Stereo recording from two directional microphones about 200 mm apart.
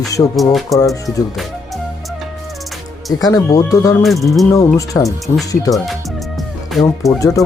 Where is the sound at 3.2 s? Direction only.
20° left (ahead or behind).